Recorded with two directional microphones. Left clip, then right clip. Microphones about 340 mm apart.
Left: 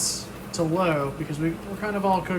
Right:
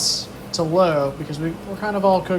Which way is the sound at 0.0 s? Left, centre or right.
Centre.